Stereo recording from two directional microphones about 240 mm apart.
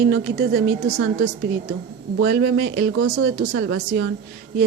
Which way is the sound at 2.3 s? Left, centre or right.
Right.